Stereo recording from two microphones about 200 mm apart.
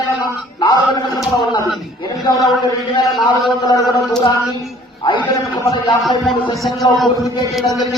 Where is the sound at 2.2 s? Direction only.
20° left (ahead or behind).